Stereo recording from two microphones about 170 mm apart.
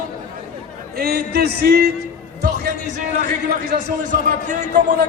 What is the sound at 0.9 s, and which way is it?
Speech, 65° right (ahead or behind).